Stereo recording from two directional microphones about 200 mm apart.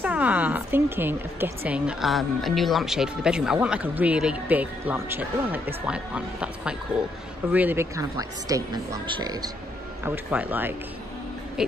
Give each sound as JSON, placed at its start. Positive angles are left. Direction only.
{"t": 0.0, "sound": "a woman's voice", "side_deg": -5}
{"t": 10.0, "sound": "a woman's voice", "side_deg": -10}